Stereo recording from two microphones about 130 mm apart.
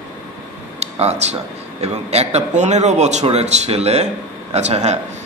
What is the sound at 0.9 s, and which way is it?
A man's voice, 55° right (ahead or behind).